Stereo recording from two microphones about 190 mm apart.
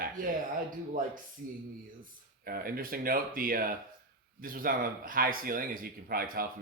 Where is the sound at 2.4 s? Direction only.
50° right (ahead or behind).